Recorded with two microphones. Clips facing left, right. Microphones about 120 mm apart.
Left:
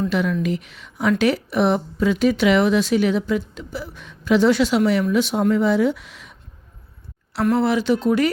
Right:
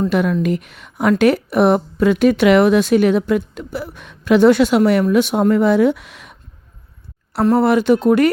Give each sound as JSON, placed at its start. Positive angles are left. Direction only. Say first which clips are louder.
{"t": 0.1, "sound": "speech", "louder": "right 4 dB", "side_deg": -50}
{"t": 7.6, "sound": "speech", "louder": "right 5 dB", "side_deg": -55}